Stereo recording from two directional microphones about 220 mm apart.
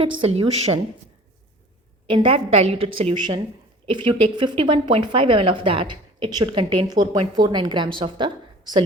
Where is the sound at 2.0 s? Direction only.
20° right (ahead or behind).